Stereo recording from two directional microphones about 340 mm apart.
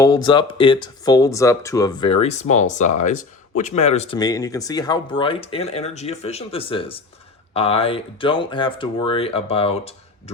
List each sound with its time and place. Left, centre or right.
0.0 s speech: centre